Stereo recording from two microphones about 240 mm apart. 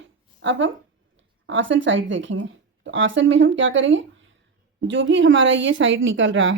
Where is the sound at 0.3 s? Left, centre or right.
Right.